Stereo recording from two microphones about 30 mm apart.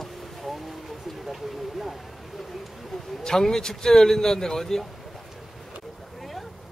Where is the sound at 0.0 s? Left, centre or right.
Centre.